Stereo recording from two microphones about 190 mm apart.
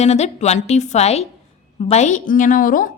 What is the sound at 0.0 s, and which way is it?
A woman's voice, 35° left (ahead or behind).